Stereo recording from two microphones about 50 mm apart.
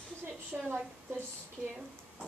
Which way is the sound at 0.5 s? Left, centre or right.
Right.